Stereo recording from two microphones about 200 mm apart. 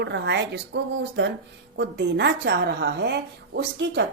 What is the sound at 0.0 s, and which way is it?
A woman's voice, 60° right (ahead or behind).